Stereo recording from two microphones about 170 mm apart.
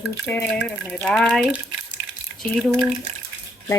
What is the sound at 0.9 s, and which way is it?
Speech, 5° left (ahead or behind).